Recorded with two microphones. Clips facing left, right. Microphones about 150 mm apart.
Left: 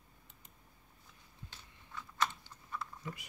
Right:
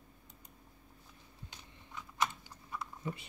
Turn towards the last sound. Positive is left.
turn(degrees=-25)  # may be behind; listen again after turning